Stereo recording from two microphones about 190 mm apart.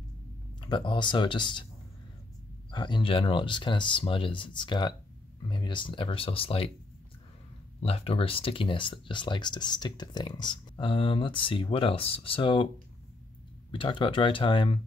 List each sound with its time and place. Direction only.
0.6 s speech: 25° left (ahead or behind)
2.7 s speech: 25° left (ahead or behind)
7.8 s speech: 30° left (ahead or behind)
13.7 s speech: 25° left (ahead or behind)